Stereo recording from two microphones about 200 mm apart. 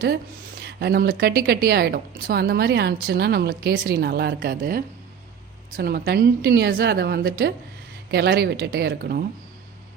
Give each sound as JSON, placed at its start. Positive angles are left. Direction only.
{"t": 0.6, "sound": "a woman's voice", "side_deg": -55}